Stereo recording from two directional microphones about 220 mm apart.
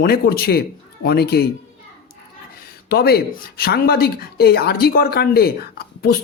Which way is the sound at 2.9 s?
45° left (ahead or behind).